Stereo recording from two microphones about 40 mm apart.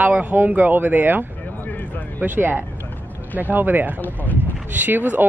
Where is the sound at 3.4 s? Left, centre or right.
Right.